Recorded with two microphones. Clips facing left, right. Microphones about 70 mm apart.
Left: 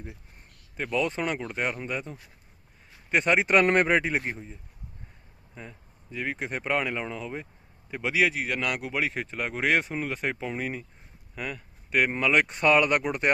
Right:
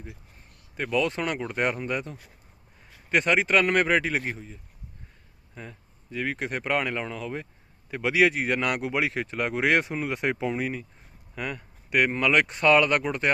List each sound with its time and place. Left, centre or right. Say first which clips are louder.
0.8 s speech: right 2 dB; centre
1.4 s speech: right 3 dB; centre
3.4 s speech: left 1 dB; left
3.8 s speech: even; centre
8.2 s speech: right 4 dB; centre